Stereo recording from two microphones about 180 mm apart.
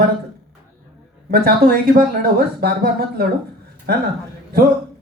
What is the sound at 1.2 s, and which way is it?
A man's voice, 55° right (ahead or behind).